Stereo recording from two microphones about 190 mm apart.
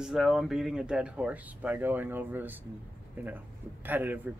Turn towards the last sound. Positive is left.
turn(degrees=-10)  # may be behind; listen again after turning